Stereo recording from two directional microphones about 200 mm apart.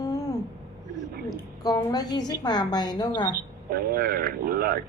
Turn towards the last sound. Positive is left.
turn(degrees=-50)  # may be behind; listen again after turning